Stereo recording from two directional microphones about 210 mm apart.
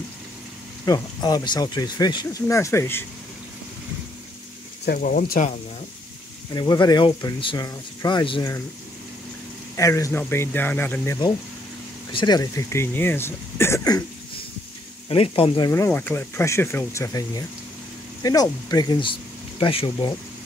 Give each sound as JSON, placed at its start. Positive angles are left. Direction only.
{"t": 0.8, "sound": "speech", "side_deg": 20}
{"t": 4.8, "sound": "speech", "side_deg": 40}
{"t": 6.5, "sound": "speech", "side_deg": 20}
{"t": 9.8, "sound": "speech", "side_deg": 15}
{"t": 15.0, "sound": "speech", "side_deg": 25}